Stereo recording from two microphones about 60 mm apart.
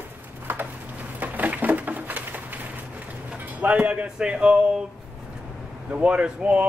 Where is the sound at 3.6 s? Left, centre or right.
Right.